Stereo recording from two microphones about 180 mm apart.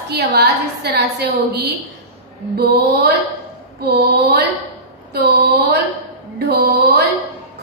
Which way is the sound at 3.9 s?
60° right (ahead or behind).